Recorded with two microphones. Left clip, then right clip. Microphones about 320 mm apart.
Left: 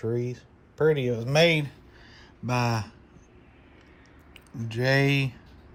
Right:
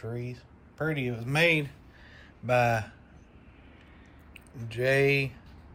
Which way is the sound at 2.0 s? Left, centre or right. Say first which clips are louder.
Right 4 dB; centre.